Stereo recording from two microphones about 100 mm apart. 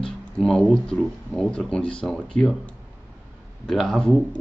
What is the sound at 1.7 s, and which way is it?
Speech, 10° left (ahead or behind).